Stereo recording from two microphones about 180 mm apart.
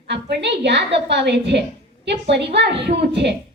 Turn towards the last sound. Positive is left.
turn(degrees=-70)  # may be behind; listen again after turning